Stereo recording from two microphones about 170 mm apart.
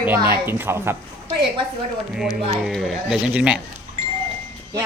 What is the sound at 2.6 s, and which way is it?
Speech, centre (ahead or behind).